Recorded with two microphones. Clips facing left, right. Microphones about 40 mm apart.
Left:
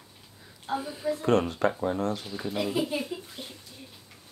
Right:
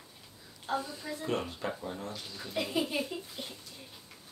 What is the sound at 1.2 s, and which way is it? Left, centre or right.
Speech, left.